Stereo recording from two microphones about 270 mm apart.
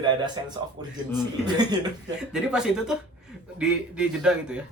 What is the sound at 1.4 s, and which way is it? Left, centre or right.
Speech, centre.